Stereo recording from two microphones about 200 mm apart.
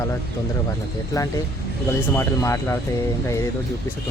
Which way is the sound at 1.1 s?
15° left (ahead or behind).